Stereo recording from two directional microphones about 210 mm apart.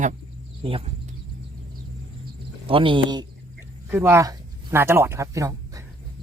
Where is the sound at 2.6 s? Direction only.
25° right (ahead or behind).